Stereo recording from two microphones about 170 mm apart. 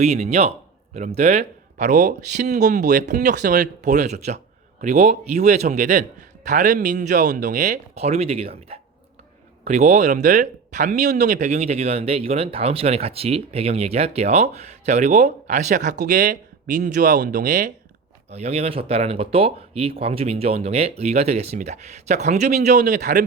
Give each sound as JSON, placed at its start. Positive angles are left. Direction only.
{"t": 0.0, "sound": "speech", "side_deg": -40}
{"t": 18.3, "sound": "speech", "side_deg": -40}